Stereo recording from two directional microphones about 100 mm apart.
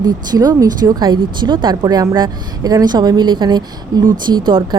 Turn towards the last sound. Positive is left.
turn(degrees=-50)  # may be behind; listen again after turning